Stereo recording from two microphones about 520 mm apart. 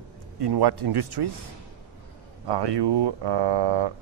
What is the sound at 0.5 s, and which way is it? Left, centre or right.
Speech, right.